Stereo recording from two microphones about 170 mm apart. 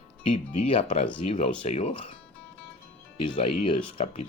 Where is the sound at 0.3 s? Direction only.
35° left (ahead or behind).